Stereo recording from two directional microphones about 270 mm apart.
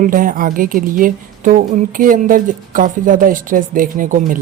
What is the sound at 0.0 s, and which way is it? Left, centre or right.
A woman's voice, right.